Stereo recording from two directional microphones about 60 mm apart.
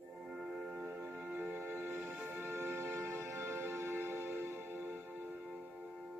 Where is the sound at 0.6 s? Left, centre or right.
Right.